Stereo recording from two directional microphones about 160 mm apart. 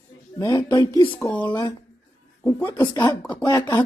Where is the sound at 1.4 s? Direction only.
30° left (ahead or behind).